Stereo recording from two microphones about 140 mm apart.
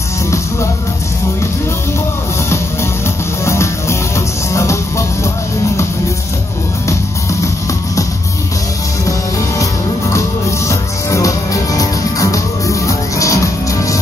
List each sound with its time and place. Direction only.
4.6 s music: 20° left (ahead or behind)
9.6 s music: 20° left (ahead or behind)